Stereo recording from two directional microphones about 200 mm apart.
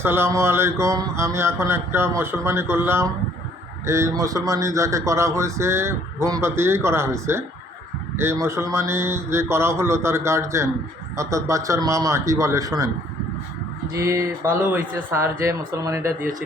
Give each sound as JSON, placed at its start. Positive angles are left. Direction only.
{"t": 0.0, "sound": "speech", "side_deg": -10}
{"t": 13.9, "sound": "speech", "side_deg": -15}